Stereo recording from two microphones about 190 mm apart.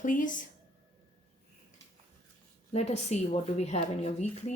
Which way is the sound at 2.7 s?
35° left (ahead or behind).